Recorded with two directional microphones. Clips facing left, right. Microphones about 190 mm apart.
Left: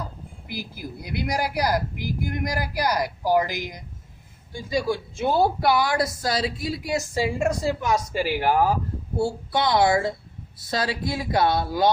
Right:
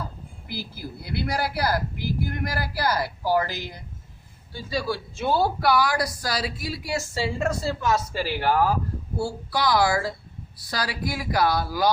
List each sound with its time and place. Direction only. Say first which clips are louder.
0.4 s a woman's voice: left 1 dB; 15° left (ahead or behind)